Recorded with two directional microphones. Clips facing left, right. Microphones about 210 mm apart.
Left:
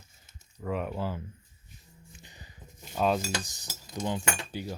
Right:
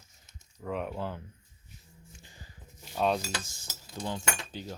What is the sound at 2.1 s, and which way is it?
Music, 20° left (ahead or behind).